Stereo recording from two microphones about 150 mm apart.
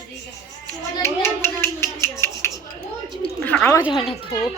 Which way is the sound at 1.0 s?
15° left (ahead or behind).